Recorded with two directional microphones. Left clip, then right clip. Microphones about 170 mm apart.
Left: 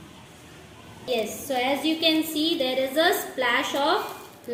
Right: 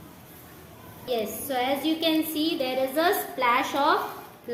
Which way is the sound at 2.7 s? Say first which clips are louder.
Left 1 dB; 15° left (ahead or behind).